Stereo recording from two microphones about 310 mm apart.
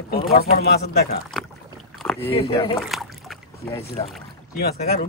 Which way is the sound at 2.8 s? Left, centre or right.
Centre.